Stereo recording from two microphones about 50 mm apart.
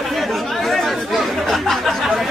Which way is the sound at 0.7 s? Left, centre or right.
Centre.